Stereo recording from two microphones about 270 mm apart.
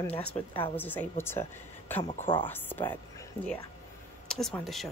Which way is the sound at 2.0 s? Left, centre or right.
Centre.